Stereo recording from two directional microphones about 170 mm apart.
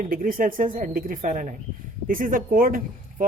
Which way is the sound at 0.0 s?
55° right (ahead or behind).